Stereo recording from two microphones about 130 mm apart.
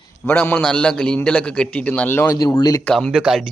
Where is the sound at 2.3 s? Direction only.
30° left (ahead or behind).